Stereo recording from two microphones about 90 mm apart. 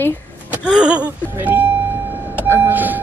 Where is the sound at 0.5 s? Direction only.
10° right (ahead or behind).